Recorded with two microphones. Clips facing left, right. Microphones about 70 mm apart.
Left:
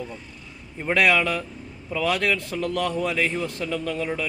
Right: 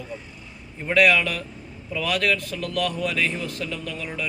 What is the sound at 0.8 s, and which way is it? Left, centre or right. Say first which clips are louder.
A man's voice: right 1 dB; left.